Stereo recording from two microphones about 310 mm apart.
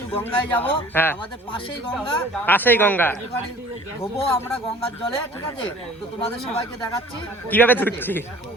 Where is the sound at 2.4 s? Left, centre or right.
Centre.